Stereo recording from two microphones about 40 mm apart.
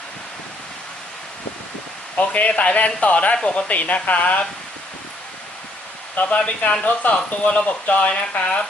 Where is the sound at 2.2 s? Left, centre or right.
Left.